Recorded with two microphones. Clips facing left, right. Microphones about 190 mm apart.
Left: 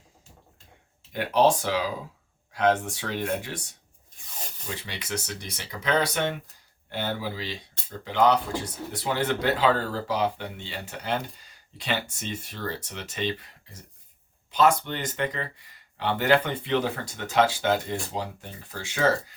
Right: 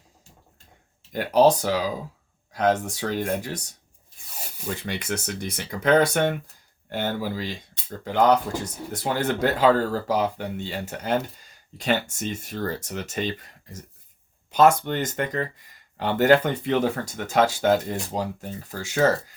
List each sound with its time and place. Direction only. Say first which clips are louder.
1.1 s speech: right 4 dB; 40° right (ahead or behind)
4.4 s rub: right 1 dB; 10° right (ahead or behind)
4.8 s speech: right 3 dB; 50° right (ahead or behind)